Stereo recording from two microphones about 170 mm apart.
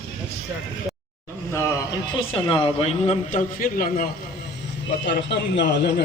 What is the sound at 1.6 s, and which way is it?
A man's voice, 25° left (ahead or behind).